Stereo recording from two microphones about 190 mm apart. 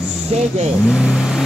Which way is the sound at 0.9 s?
5° right (ahead or behind).